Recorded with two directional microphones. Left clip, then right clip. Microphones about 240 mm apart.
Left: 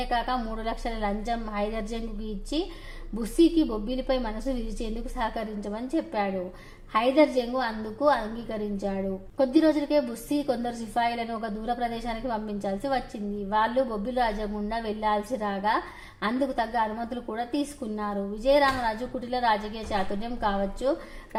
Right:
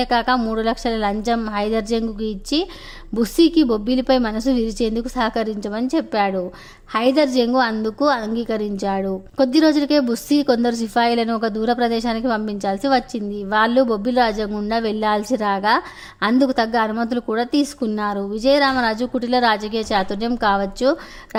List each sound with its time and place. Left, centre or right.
0.0 s a woman's voice: right
3.2 s a woman's voice: right